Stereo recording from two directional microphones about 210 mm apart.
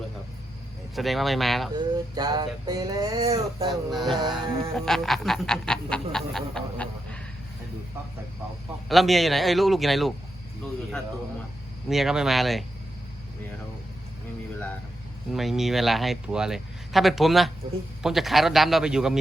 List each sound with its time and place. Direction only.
0.9 s speech: centre (ahead or behind)
1.7 s speech: 20° right (ahead or behind)
3.7 s speech: centre (ahead or behind)
4.2 s speech: 20° right (ahead or behind)
4.9 s a sound: centre (ahead or behind)
8.9 s speech: centre (ahead or behind)
11.9 s speech: centre (ahead or behind)
15.3 s speech: centre (ahead or behind)